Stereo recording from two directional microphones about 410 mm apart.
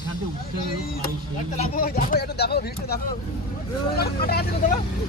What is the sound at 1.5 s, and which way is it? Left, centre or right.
Speech, centre.